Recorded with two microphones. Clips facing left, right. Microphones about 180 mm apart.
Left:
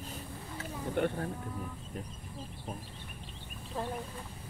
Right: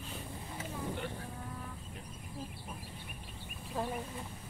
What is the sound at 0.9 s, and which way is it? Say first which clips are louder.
Vehicle: left 9 dB; 55° left (ahead or behind).